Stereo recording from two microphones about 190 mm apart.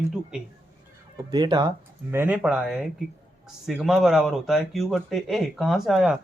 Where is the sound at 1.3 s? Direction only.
20° right (ahead or behind).